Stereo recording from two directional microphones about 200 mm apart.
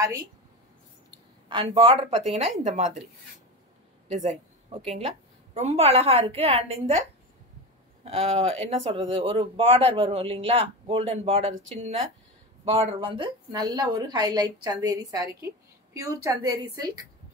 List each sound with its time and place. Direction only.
1.5 s a woman's voice: 25° right (ahead or behind)
4.1 s a woman's voice: 35° right (ahead or behind)
8.0 s a woman's voice: 30° right (ahead or behind)